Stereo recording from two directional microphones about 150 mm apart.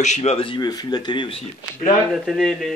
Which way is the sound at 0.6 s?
25° left (ahead or behind).